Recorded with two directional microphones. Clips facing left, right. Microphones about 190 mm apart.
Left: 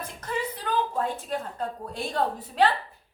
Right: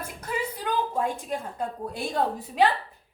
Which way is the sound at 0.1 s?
10° right (ahead or behind).